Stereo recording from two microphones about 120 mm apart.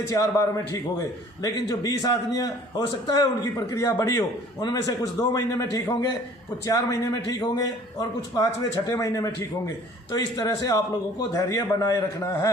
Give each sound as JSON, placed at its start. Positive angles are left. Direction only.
{"t": 0.1, "sound": "a man's voice", "side_deg": 30}